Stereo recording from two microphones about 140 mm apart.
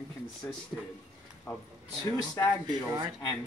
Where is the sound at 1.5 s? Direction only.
20° left (ahead or behind).